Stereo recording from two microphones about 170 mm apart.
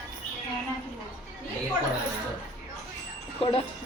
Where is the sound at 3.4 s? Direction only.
35° left (ahead or behind).